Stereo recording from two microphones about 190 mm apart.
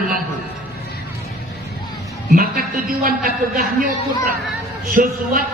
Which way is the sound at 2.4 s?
50° right (ahead or behind).